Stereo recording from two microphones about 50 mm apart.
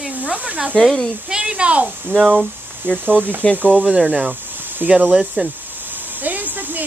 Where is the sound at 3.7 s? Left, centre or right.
Centre.